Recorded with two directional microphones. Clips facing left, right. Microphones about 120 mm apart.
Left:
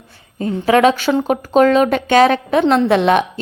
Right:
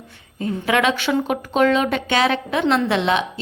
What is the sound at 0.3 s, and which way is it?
A woman's voice, 40° left (ahead or behind).